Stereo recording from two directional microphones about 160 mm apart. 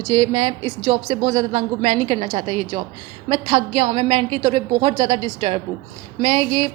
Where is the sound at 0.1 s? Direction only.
25° right (ahead or behind).